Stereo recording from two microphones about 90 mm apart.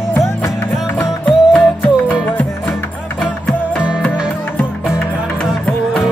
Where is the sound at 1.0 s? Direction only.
10° left (ahead or behind).